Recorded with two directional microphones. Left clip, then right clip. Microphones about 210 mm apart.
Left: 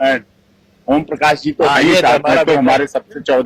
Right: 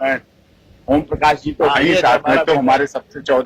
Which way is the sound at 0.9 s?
50° left (ahead or behind).